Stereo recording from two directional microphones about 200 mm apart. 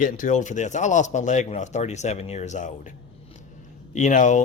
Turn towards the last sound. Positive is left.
turn(degrees=40)  # may be behind; listen again after turning